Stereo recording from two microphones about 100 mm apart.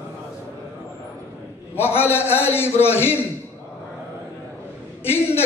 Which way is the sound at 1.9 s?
25° left (ahead or behind).